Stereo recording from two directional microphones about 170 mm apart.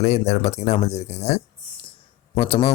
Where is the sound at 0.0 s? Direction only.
40° left (ahead or behind).